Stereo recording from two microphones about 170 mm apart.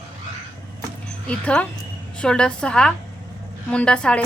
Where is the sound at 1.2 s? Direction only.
5° left (ahead or behind).